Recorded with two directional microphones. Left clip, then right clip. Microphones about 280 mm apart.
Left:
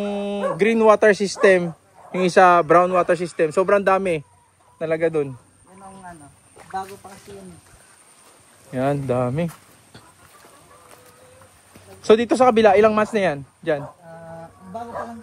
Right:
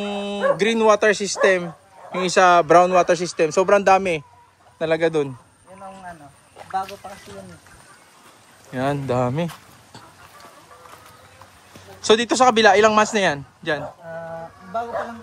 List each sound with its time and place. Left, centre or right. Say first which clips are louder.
0.0 s speech: right 2 dB; centre
6.7 s a sound: right 4 dB; right
8.7 s speech: left 1 dB; centre
12.0 s speech: left 1 dB; centre